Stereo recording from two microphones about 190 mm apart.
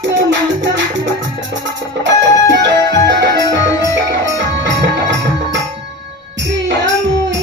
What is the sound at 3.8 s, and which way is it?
Music, 70° right (ahead or behind).